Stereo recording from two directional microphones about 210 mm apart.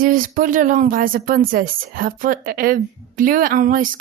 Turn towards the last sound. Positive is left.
turn(degrees=-40)  # may be behind; listen again after turning